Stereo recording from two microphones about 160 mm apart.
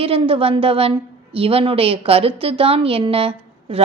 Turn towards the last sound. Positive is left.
turn(degrees=-35)  # may be behind; listen again after turning